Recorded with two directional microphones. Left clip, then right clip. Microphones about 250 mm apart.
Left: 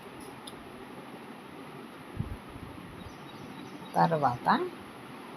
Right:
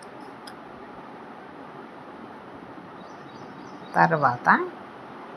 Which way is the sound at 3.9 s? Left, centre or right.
Centre.